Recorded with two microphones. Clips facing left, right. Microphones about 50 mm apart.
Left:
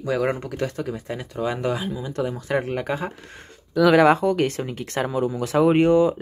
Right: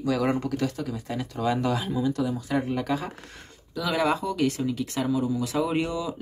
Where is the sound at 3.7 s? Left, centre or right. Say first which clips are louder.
Left 10 dB; left.